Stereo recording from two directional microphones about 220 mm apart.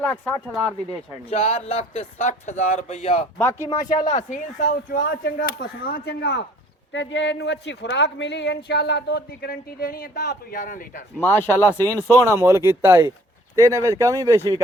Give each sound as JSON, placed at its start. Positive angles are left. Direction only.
{"t": 0.0, "sound": "speech", "side_deg": 5}
{"t": 1.3, "sound": "speech", "side_deg": 30}
{"t": 4.1, "sound": "speech", "side_deg": 35}
{"t": 11.2, "sound": "speech", "side_deg": 10}
{"t": 12.2, "sound": "speech", "side_deg": -10}